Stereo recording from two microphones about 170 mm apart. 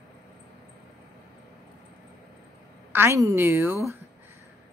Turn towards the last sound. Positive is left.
turn(degrees=-15)  # may be behind; listen again after turning